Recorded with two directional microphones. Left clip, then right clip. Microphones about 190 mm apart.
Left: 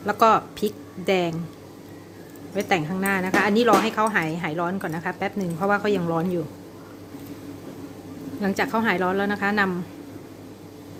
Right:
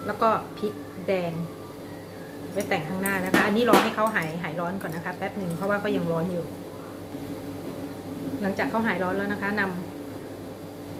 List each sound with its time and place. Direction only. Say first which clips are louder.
0.1 s speech: left 6 dB; 65° left (ahead or behind)
2.6 s speech: left 4 dB; 60° left (ahead or behind)
8.4 s speech: left 3 dB; 65° left (ahead or behind)